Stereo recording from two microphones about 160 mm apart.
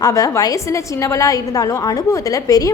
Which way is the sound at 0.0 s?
20° left (ahead or behind).